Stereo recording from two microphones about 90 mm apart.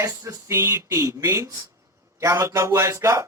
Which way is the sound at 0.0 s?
30° right (ahead or behind).